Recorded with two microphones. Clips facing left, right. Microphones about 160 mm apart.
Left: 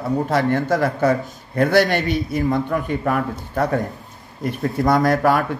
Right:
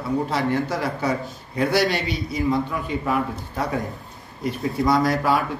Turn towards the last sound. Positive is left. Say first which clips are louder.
# left 3 dB
turn(degrees=55)  # may be behind; listen again after turning